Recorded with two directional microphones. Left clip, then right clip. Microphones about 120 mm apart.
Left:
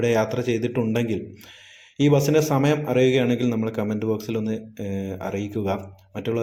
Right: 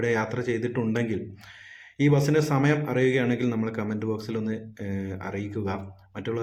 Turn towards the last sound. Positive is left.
turn(degrees=20)  # may be behind; listen again after turning